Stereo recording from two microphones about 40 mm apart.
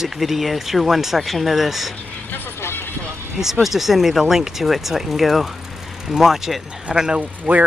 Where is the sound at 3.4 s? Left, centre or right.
Centre.